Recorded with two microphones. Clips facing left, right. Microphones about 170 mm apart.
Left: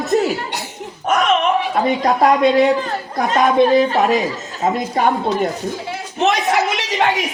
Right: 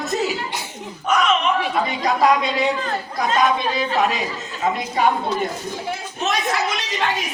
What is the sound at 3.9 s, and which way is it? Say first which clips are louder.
Speech: left 5 dB; 45° left (ahead or behind).